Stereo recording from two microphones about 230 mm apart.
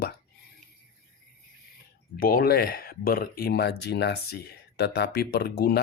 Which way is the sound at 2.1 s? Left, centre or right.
Left.